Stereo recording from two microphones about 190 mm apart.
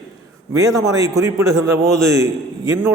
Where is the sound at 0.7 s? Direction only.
15° right (ahead or behind).